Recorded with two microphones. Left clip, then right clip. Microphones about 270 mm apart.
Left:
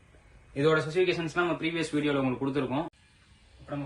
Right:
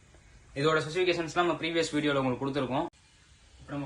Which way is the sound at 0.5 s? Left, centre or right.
Right.